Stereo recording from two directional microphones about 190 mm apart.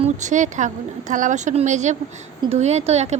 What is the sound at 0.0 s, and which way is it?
Speech, 40° right (ahead or behind).